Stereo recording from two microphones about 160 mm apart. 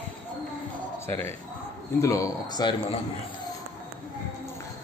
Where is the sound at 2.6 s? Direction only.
30° left (ahead or behind).